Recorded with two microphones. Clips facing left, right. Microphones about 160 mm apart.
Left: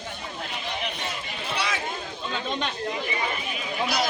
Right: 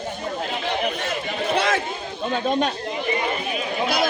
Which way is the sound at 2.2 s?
45° right (ahead or behind).